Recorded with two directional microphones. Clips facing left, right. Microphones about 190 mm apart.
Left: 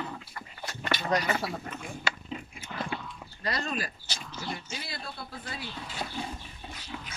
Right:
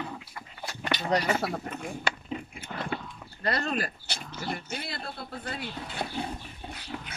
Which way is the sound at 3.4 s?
60° right (ahead or behind).